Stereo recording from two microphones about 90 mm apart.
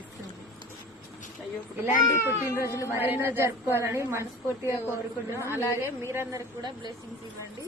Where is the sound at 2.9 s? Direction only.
25° right (ahead or behind).